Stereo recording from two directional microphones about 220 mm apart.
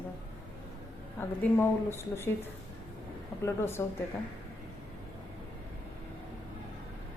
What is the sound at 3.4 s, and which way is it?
Speech, 10° left (ahead or behind).